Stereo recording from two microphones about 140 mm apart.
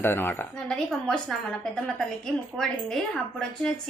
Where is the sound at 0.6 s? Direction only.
5° left (ahead or behind).